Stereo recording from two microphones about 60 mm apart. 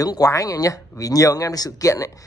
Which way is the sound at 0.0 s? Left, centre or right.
Left.